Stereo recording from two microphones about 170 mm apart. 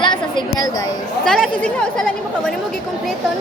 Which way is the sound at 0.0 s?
25° left (ahead or behind).